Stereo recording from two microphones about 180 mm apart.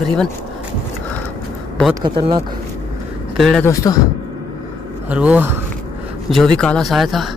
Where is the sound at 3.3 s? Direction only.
Centre (ahead or behind).